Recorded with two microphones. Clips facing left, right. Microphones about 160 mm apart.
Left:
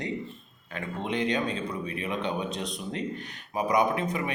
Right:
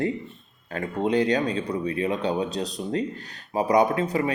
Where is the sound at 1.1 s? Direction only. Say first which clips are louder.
Right 5 dB; 40° right (ahead or behind).